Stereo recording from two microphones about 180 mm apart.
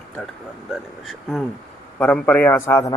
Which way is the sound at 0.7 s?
Centre (ahead or behind).